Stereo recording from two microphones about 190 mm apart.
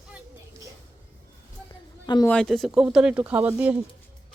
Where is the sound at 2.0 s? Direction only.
20° left (ahead or behind).